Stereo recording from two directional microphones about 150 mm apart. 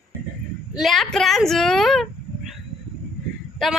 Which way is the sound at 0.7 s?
Centre (ahead or behind).